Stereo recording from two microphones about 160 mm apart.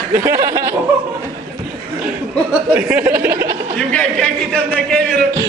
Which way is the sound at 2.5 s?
10° right (ahead or behind).